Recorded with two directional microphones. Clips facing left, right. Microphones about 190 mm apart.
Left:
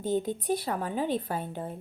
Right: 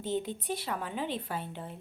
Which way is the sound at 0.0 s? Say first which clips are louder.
Left 5 dB; 45° left (ahead or behind).